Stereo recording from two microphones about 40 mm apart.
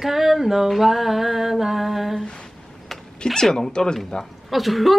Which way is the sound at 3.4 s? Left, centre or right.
Centre.